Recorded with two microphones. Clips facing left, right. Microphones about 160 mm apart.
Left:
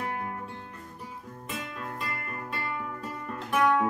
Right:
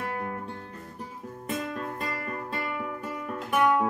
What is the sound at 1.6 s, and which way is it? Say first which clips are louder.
Music: right 4 dB; 45° right (ahead or behind).